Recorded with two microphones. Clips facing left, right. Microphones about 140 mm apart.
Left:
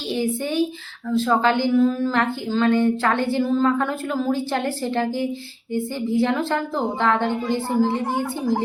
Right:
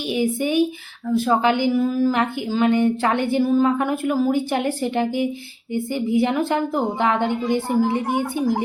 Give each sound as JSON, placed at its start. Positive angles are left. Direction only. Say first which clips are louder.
{"t": 0.1, "sound": "a woman's voice", "louder": "right 2 dB", "side_deg": -15}